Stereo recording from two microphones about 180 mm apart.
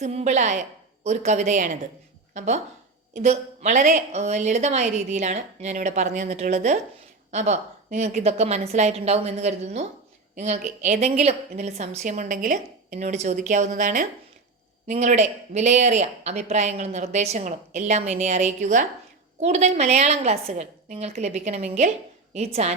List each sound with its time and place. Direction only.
0.0 s a woman's voice: 40° right (ahead or behind)